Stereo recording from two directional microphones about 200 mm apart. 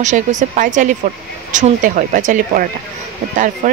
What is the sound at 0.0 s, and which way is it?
Speech, 35° right (ahead or behind).